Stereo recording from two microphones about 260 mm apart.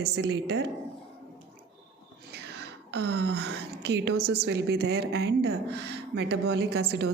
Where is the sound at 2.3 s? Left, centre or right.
Right.